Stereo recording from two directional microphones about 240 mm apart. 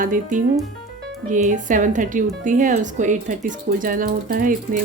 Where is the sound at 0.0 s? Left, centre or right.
Right.